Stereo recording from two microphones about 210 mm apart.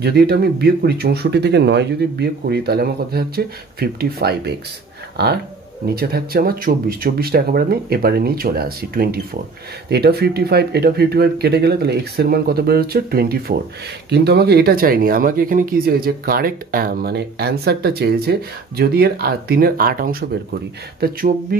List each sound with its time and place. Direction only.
0.0 s speech: 50° right (ahead or behind)